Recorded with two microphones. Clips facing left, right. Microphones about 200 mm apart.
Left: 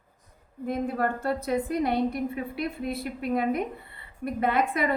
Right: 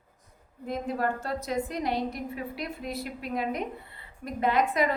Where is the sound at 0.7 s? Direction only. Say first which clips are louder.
Left 2 dB; 55° left (ahead or behind).